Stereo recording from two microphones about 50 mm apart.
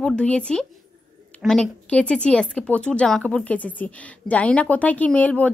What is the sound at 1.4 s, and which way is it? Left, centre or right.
Speech, right.